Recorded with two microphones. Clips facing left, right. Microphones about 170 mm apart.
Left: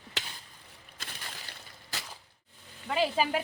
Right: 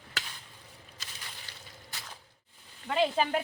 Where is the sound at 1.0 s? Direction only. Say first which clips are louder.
Left 6 dB; 55° left (ahead or behind).